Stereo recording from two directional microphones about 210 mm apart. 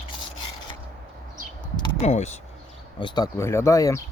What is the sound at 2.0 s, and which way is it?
Speech, 30° left (ahead or behind).